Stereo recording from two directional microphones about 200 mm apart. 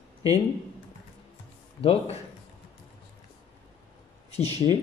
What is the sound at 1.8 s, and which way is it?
Speech, 30° left (ahead or behind).